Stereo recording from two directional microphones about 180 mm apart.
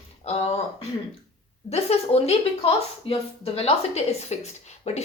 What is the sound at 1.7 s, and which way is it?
A woman's voice, 35° left (ahead or behind).